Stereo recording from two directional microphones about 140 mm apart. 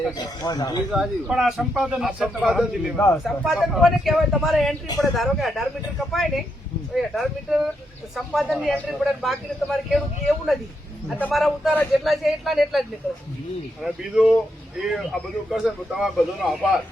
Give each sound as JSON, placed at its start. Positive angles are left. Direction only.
{"t": 0.4, "sound": "speech", "side_deg": 30}
{"t": 0.9, "sound": "speech", "side_deg": -5}
{"t": 13.8, "sound": "speech", "side_deg": -5}